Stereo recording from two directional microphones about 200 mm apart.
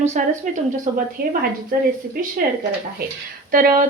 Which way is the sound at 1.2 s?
50° right (ahead or behind).